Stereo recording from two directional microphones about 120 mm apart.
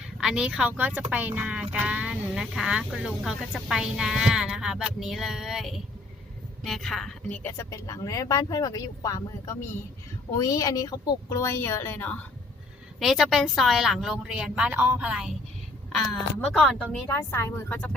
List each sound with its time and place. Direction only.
0.2 s speech: 5° right (ahead or behind); by 7.5 s 10° left (ahead or behind)
7.5 s speech: 25° left (ahead or behind)
13.0 s speech: centre (ahead or behind)
15.9 s speech: 5° left (ahead or behind)
17.1 s a woman's voice: 20° left (ahead or behind)